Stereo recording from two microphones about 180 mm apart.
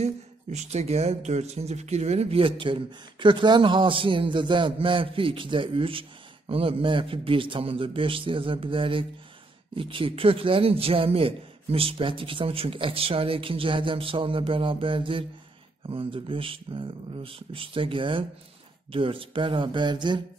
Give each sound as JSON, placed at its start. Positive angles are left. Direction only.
{"t": 0.0, "sound": "speech", "side_deg": -40}